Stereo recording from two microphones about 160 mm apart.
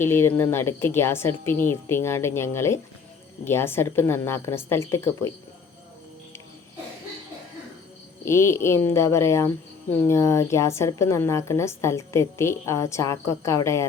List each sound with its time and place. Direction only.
0.0 s speech: 15° left (ahead or behind)
8.2 s speech: 15° left (ahead or behind)